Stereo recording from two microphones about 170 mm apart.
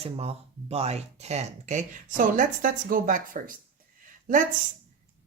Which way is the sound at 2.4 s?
55° right (ahead or behind).